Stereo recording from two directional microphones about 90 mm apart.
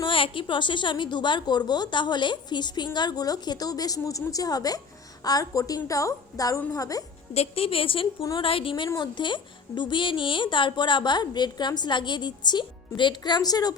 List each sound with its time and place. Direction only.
0.0 s a woman's voice: 75° left (ahead or behind); by 7.0 s 40° left (ahead or behind)
7.5 s a woman's voice: 90° left
9.0 s a woman's voice: 60° left (ahead or behind)